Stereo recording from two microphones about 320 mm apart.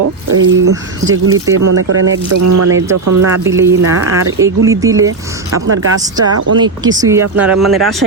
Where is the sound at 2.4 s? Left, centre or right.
Right.